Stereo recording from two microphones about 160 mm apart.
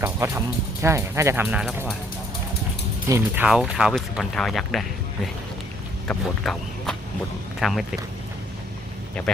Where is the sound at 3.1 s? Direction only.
15° right (ahead or behind).